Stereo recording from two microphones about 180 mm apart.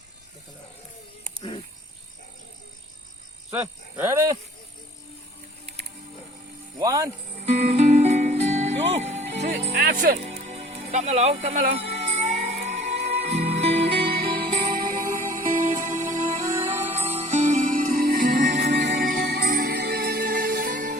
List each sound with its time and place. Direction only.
3.5 s speech: 10° right (ahead or behind)
6.7 s speech: 20° right (ahead or behind)
7.4 s music: 35° right (ahead or behind)
9.8 s speech: 55° right (ahead or behind)
10.4 s music: 35° right (ahead or behind)
13.9 s music: 60° right (ahead or behind); by 16.4 s 45° right (ahead or behind)
16.5 s music: 15° right (ahead or behind)
17.1 s music: 35° right (ahead or behind)
18.5 s music: 75° right (ahead or behind)
18.9 s music: 50° right (ahead or behind)